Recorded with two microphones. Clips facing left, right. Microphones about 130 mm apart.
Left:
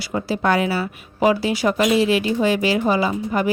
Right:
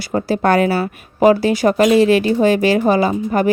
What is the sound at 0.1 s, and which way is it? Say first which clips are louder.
Speech: right 5 dB; 45° right (ahead or behind).